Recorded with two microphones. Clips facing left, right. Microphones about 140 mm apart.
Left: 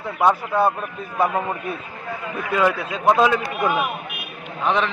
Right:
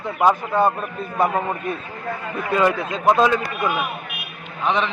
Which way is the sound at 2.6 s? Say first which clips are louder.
Right 1 dB; 5° left (ahead or behind).